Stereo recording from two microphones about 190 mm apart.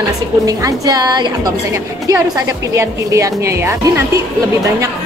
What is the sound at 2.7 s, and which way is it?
A woman's voice, 15° right (ahead or behind).